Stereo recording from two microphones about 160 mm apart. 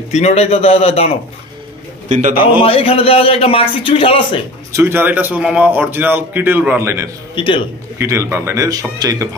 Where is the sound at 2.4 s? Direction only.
35° left (ahead or behind).